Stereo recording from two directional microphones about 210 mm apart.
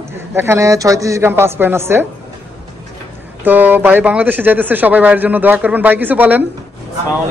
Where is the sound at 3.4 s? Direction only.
10° right (ahead or behind).